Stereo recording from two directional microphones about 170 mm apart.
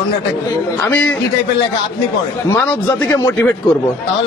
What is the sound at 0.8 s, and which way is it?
Speech, 10° left (ahead or behind).